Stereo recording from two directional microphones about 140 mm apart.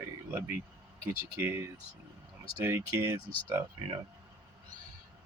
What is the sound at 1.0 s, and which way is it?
Speech, 15° right (ahead or behind).